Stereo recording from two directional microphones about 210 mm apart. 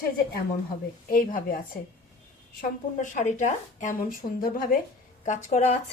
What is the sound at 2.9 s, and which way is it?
Speech, 35° left (ahead or behind).